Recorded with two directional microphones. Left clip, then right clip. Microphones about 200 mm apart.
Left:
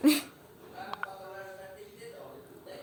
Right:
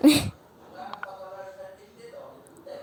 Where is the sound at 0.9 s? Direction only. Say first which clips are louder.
Even; centre (ahead or behind).